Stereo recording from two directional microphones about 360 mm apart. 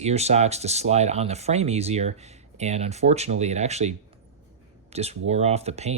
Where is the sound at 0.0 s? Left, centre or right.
Centre.